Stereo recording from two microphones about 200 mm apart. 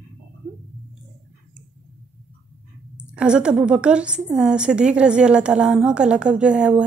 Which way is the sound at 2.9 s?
5° right (ahead or behind).